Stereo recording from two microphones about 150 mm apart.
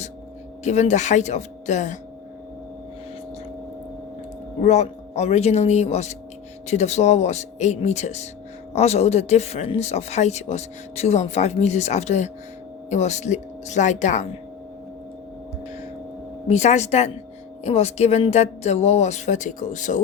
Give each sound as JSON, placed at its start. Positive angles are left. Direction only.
{"t": 0.6, "sound": "speech", "side_deg": 50}
{"t": 4.6, "sound": "speech", "side_deg": 50}
{"t": 16.5, "sound": "speech", "side_deg": 50}